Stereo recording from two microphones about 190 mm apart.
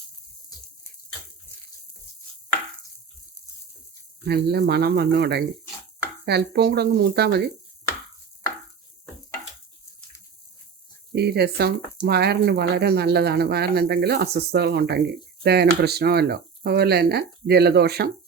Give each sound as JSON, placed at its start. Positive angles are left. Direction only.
{"t": 4.3, "sound": "speech", "side_deg": -60}
{"t": 11.1, "sound": "speech", "side_deg": -60}